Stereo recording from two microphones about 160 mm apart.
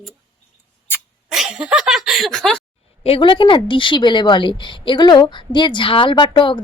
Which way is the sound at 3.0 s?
35° left (ahead or behind).